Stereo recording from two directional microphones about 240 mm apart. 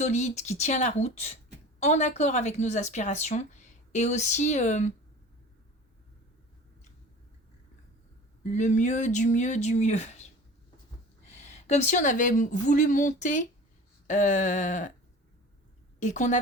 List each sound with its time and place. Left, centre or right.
0.0 s a woman's voice: left
8.5 s a woman's voice: left
11.3 s speech: left
16.0 s a woman's voice: left